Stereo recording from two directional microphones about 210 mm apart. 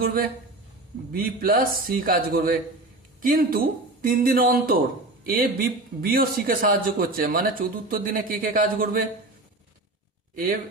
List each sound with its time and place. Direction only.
0.0 s a man's voice: 45° right (ahead or behind)